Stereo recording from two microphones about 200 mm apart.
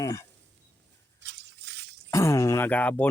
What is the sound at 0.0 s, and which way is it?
Speech, 20° left (ahead or behind).